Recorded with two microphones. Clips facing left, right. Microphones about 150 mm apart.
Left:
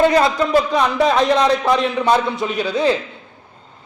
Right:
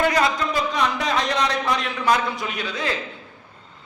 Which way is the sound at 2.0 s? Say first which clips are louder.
Left 1 dB; 25° left (ahead or behind).